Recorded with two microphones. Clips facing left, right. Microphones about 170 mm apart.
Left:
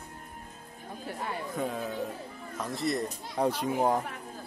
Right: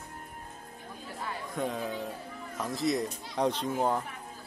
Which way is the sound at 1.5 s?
Centre (ahead or behind).